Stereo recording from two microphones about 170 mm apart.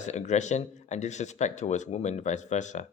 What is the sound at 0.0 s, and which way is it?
Speech, 45° left (ahead or behind).